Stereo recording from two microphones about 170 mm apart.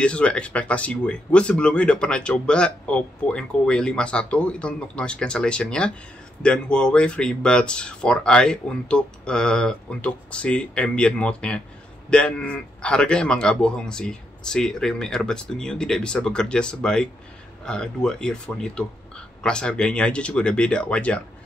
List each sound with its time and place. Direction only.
0.0 s speech: 5° left (ahead or behind)